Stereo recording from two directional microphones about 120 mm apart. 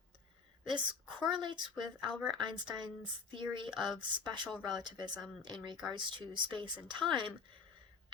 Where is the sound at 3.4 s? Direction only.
45° right (ahead or behind).